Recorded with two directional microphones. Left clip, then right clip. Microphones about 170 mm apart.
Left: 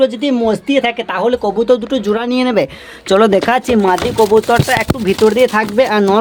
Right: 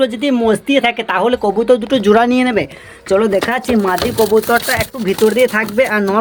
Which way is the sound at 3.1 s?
35° left (ahead or behind).